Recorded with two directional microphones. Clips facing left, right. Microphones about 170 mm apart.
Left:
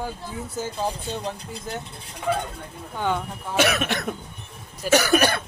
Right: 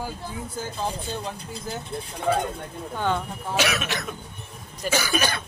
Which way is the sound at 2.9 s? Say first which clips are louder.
Even; 10° left (ahead or behind).